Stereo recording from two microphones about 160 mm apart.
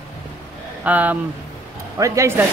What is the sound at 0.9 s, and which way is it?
Speech, 10° right (ahead or behind).